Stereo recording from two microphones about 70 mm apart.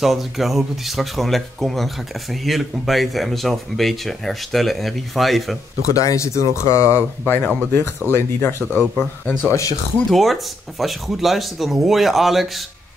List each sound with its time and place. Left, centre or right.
0.0 s speech: centre
5.9 s speech: left
7.2 s speech: left
9.5 s speech: left
10.0 s speech: centre